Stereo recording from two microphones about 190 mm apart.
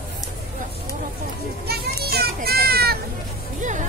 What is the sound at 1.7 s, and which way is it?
Children playing, 55° right (ahead or behind).